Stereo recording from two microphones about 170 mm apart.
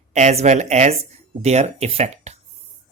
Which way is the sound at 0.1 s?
40° right (ahead or behind).